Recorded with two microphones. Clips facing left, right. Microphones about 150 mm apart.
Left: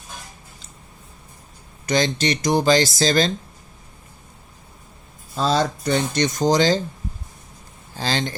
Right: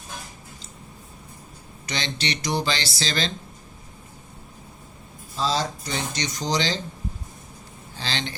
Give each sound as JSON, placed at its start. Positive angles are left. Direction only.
{"t": 1.9, "sound": "speech", "side_deg": 45}
{"t": 5.4, "sound": "speech", "side_deg": 55}
{"t": 7.9, "sound": "speech", "side_deg": 45}